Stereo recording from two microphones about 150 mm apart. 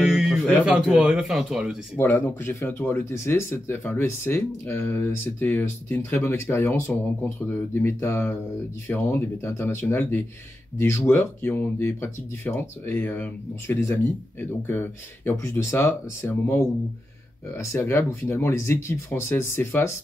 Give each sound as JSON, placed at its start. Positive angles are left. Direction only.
{"t": 0.0, "sound": "a sound", "side_deg": 0}
{"t": 0.7, "sound": "speech", "side_deg": -5}
{"t": 2.0, "sound": "speech", "side_deg": 10}